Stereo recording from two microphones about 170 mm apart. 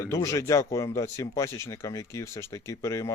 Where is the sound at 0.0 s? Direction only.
20° left (ahead or behind).